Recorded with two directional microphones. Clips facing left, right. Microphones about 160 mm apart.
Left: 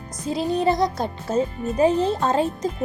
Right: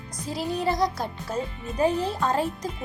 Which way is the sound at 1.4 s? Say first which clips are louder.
Left 9 dB; 45° left (ahead or behind).